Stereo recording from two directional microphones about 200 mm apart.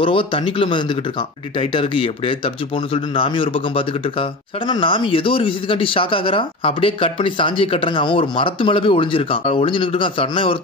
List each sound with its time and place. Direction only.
0.0 s speech: 25° left (ahead or behind)